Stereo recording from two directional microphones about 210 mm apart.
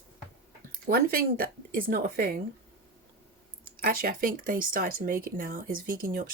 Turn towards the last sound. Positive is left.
turn(degrees=-40)  # may be behind; listen again after turning